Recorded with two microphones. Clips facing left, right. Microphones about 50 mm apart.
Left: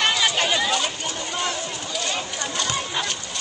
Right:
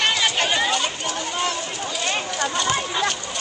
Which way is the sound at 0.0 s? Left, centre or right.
Centre.